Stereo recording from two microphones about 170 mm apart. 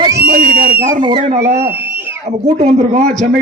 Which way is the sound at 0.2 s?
60° right (ahead or behind).